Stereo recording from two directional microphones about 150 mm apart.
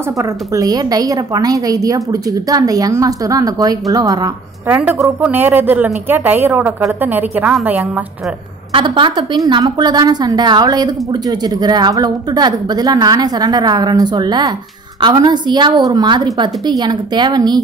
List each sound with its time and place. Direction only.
0.2 s a woman's voice: 20° right (ahead or behind)
4.6 s a woman's voice: 10° right (ahead or behind)
8.7 s a woman's voice: 30° right (ahead or behind)